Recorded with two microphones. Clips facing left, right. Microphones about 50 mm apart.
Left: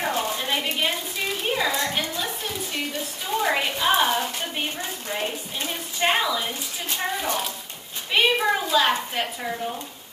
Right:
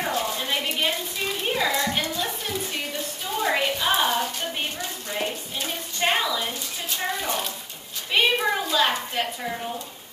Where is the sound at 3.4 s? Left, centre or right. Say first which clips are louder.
Even; centre.